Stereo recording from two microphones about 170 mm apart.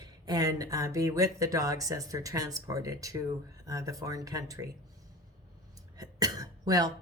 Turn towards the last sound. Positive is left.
turn(degrees=-20)  # may be behind; listen again after turning